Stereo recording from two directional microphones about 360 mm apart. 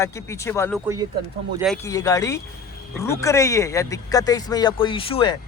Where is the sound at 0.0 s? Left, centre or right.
Centre.